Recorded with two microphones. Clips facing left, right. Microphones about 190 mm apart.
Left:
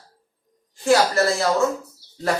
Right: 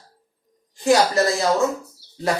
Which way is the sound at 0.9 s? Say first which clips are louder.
Right 1 dB; 15° right (ahead or behind).